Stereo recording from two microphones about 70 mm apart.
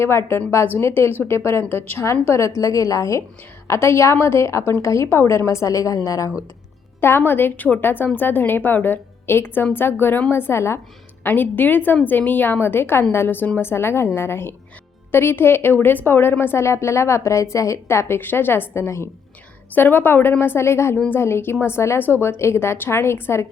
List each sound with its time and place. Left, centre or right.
0.0 s a woman's voice: left
7.0 s a woman's voice: left
11.2 s a woman's voice: left
19.7 s a woman's voice: left